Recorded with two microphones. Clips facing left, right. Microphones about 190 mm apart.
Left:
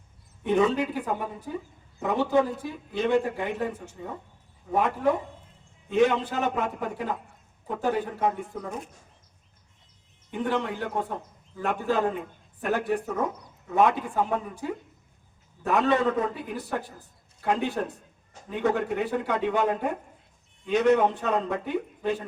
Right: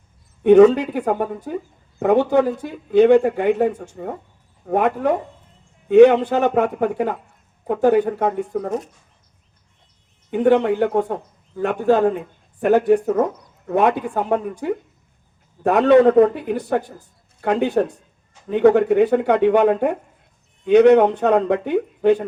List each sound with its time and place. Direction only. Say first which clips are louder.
0.4 s a man's voice: right 13 dB; 70° right (ahead or behind)
10.3 s a man's voice: right 12 dB; 65° right (ahead or behind)
15.6 s a man's voice: right 11 dB; 65° right (ahead or behind)